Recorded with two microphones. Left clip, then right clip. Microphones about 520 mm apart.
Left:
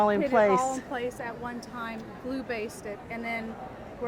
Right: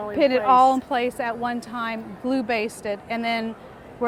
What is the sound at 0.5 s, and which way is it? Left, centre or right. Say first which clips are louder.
A woman's voice: right 11 dB; right.